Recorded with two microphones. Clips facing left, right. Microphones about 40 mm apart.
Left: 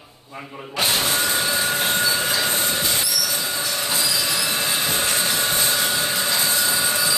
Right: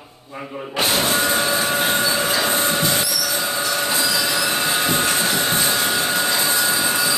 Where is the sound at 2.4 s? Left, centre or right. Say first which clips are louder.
Right 3 dB; centre.